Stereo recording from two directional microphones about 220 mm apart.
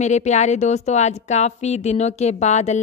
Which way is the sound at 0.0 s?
30° left (ahead or behind).